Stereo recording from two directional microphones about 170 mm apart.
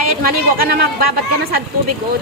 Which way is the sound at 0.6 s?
65° right (ahead or behind).